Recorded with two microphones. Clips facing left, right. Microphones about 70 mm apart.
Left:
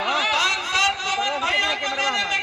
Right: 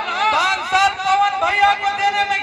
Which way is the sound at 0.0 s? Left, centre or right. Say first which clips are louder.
Right 5 dB; right.